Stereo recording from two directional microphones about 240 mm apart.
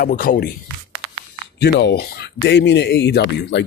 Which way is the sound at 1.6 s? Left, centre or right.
Left.